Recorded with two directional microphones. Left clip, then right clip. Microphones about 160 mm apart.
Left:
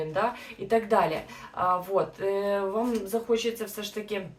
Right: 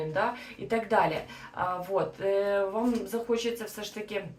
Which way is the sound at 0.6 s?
25° left (ahead or behind).